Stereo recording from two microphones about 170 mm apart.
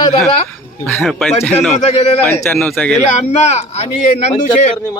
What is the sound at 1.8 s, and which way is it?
Speech, 40° left (ahead or behind).